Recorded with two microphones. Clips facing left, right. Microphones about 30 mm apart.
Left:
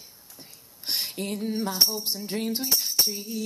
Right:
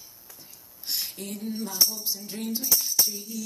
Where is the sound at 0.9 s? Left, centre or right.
Left.